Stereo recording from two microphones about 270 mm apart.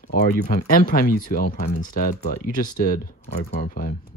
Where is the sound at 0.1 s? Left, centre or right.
Left.